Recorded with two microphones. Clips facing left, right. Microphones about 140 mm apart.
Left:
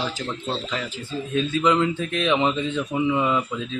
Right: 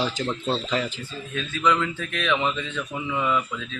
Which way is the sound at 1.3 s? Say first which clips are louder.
Left 3 dB; 30° left (ahead or behind).